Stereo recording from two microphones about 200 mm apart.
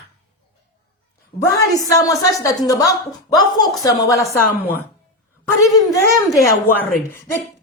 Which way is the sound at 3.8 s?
15° left (ahead or behind).